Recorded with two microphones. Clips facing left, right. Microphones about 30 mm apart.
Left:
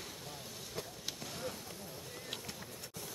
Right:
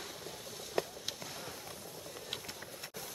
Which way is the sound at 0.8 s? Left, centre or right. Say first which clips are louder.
Right 10 dB; right.